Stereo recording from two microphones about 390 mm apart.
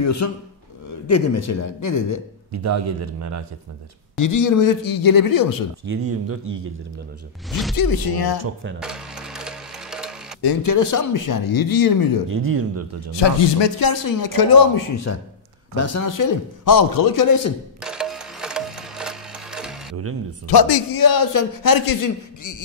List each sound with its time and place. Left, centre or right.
0.0 s a man's voice: left
3.0 s speech: right
4.2 s a man's voice: left
5.9 s speech: right
7.7 s a man's voice: left
8.7 s music: centre
10.6 s a man's voice: left
12.3 s speech: right
13.1 s a man's voice: left
15.1 s a man's voice: left
17.7 s music: centre
20.4 s a man's voice: left